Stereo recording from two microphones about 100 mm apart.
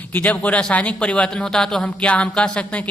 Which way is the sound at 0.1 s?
15° left (ahead or behind).